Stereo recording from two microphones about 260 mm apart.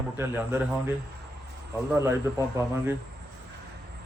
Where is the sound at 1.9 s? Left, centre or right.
Centre.